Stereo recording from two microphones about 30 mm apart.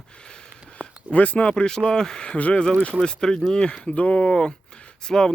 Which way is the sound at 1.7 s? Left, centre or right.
Left.